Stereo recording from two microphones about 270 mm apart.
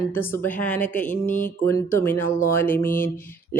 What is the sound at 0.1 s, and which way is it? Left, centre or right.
Speech, centre.